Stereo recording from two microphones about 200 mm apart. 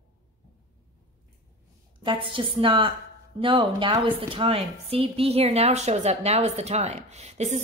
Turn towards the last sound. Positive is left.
turn(degrees=-35)  # may be behind; listen again after turning